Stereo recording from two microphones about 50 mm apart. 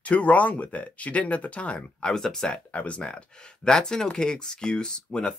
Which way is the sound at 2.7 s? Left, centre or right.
Left.